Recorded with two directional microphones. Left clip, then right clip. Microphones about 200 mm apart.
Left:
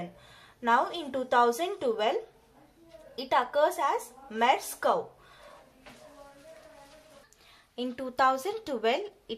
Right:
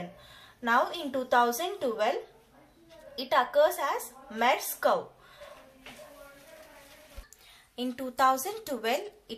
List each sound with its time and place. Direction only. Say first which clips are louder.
0.6 s speech: left 1 dB; 35° left (ahead or behind)
3.2 s speech: right 2 dB; 40° left (ahead or behind)
7.7 s speech: left 1 dB; 40° left (ahead or behind)